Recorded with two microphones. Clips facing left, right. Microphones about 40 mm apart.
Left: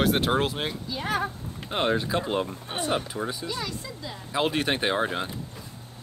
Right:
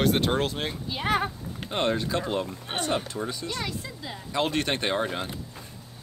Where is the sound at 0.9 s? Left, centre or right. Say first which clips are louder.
Right 3 dB; right.